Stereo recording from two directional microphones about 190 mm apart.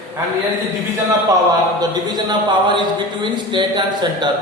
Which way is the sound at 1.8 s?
20° right (ahead or behind).